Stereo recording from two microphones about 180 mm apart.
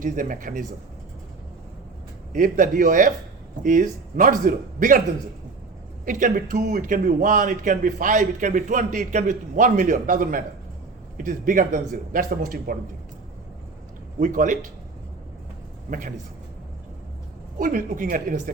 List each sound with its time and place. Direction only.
0.0 s a man's voice: 45° right (ahead or behind)
2.3 s a man's voice: 50° right (ahead or behind)
6.1 s a man's voice: 50° right (ahead or behind)
14.2 s a man's voice: 45° right (ahead or behind)
15.9 s a man's voice: 50° right (ahead or behind)
17.6 s a man's voice: 50° right (ahead or behind)